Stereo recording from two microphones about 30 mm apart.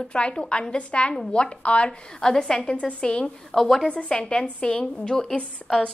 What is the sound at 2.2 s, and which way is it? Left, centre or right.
Speech, left.